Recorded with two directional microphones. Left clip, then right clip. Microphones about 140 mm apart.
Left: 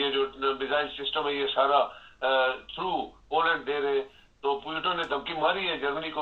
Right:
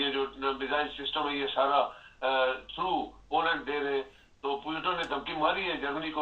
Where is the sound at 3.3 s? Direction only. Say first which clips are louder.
Left 3 dB; 35° left (ahead or behind).